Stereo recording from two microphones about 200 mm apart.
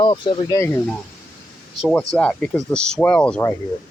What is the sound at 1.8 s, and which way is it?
Speech, centre (ahead or behind).